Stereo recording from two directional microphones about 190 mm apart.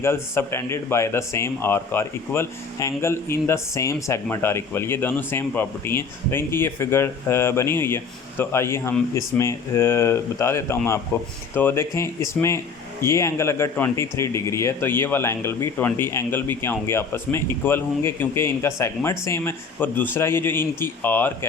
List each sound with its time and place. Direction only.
0.0 s speech: 15° left (ahead or behind)